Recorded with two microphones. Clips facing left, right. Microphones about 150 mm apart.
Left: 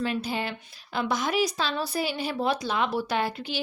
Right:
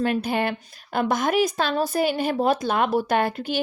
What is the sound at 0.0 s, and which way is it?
Speech, 55° right (ahead or behind).